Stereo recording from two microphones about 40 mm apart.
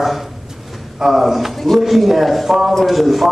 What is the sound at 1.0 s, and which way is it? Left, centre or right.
A man's voice, centre.